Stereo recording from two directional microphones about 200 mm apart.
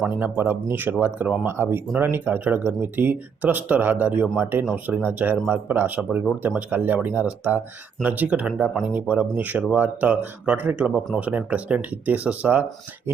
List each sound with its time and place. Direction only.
0.0 s speech: 10° right (ahead or behind)